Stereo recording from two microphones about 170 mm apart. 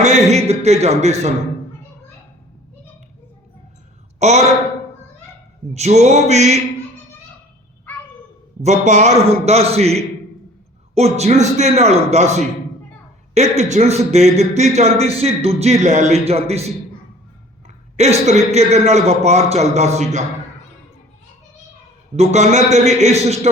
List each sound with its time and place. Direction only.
0.0 s a man's voice: 40° right (ahead or behind)
4.2 s a woman's voice: 40° right (ahead or behind)
5.7 s a man's voice: 40° right (ahead or behind)
8.6 s a man's voice: 45° right (ahead or behind)
17.9 s a man's voice: 40° right (ahead or behind)
22.1 s a man's voice: 40° right (ahead or behind)